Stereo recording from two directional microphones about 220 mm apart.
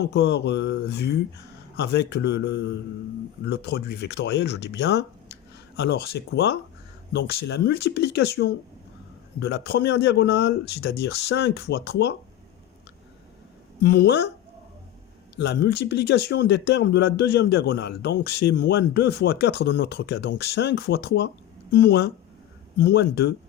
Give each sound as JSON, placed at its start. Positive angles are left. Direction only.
{"t": 0.1, "sound": "speech", "side_deg": 50}
{"t": 13.8, "sound": "speech", "side_deg": 45}
{"t": 15.4, "sound": "speech", "side_deg": 50}